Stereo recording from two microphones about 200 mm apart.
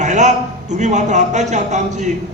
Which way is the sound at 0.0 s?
35° right (ahead or behind).